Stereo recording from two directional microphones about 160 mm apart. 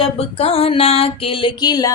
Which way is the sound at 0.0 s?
40° left (ahead or behind).